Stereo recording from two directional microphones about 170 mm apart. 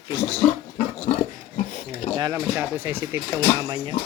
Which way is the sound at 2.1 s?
20° right (ahead or behind).